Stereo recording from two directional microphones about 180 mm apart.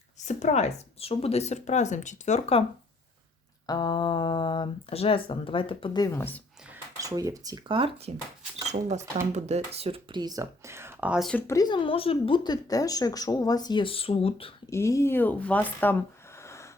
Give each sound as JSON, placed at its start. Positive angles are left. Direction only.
{"t": 0.3, "sound": "speech", "side_deg": 40}
{"t": 3.7, "sound": "speech", "side_deg": 20}
{"t": 7.0, "sound": "speech", "side_deg": -20}
{"t": 11.3, "sound": "speech", "side_deg": 10}
{"t": 14.7, "sound": "speech", "side_deg": 15}